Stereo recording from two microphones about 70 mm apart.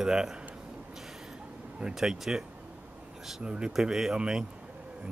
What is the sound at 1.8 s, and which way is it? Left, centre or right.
Speech, centre.